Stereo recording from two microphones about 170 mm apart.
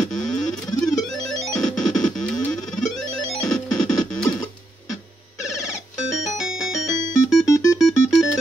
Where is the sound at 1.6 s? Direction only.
Centre (ahead or behind).